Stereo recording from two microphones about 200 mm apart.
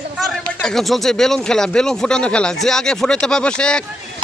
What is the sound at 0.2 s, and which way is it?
Speech, 5° left (ahead or behind).